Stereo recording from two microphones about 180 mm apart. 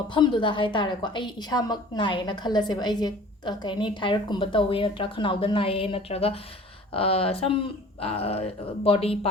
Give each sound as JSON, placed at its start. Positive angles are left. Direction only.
{"t": 0.1, "sound": "a woman's voice", "side_deg": 25}